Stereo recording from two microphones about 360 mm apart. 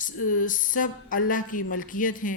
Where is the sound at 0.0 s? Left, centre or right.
Left.